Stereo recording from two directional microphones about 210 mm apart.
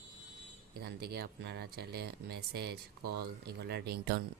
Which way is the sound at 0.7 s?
50° right (ahead or behind).